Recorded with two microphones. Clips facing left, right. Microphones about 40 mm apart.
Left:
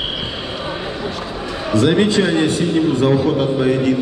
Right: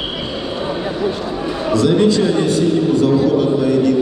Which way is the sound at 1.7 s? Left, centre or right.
Left.